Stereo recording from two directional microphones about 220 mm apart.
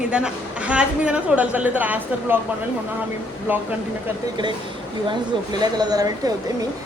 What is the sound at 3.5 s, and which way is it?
Speech, 10° right (ahead or behind).